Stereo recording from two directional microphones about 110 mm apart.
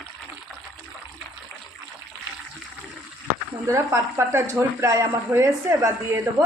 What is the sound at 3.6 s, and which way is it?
Speech, 25° right (ahead or behind).